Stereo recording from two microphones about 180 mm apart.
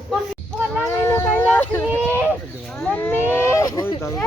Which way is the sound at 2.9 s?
10° left (ahead or behind).